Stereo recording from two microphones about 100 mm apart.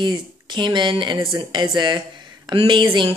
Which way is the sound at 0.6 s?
50° right (ahead or behind).